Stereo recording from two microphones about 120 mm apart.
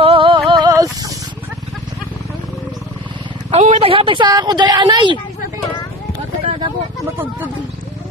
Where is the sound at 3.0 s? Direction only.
40° right (ahead or behind).